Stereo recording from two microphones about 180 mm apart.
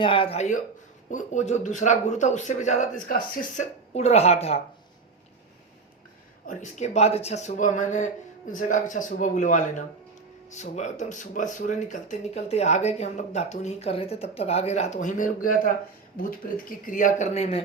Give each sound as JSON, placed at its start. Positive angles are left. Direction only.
{"t": 0.0, "sound": "speech", "side_deg": 30}
{"t": 6.5, "sound": "a man's voice", "side_deg": 40}